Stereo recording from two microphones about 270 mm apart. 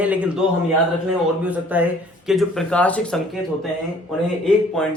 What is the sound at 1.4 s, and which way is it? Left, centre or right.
Speech, centre.